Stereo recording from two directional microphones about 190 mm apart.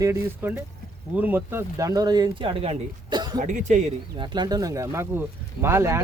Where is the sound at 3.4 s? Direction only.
40° right (ahead or behind).